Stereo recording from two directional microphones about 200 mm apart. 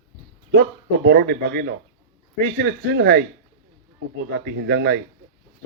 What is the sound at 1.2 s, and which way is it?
Speech, 50° right (ahead or behind).